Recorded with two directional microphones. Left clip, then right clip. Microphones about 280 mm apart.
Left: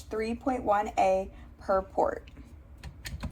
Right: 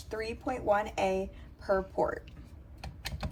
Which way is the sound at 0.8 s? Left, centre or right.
Left.